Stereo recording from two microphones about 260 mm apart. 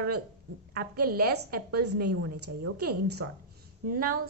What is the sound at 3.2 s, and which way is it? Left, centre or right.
Speech, right.